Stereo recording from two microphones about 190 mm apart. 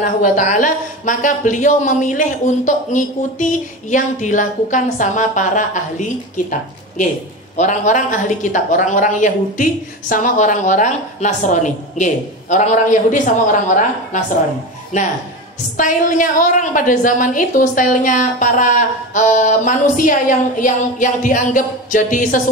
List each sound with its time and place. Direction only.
0.0 s a woman's voice: 40° left (ahead or behind)